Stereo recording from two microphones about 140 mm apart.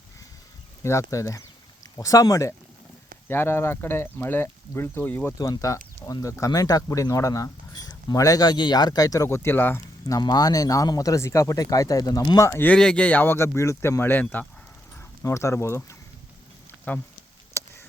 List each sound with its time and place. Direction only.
0.8 s speech: 20° left (ahead or behind)
5.4 s speech: 25° left (ahead or behind)
10.2 s speech: 30° left (ahead or behind)
12.5 s speech: 15° left (ahead or behind)
17.6 s a sound: 20° left (ahead or behind)